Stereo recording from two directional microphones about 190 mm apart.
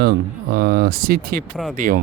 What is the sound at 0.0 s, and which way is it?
Speech, 55° right (ahead or behind).